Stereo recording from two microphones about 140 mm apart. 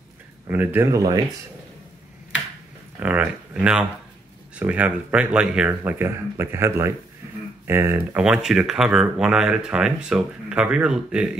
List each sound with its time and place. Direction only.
0.5 s speech: 15° right (ahead or behind)
3.0 s speech: 10° right (ahead or behind)
8.2 s speech: 5° right (ahead or behind)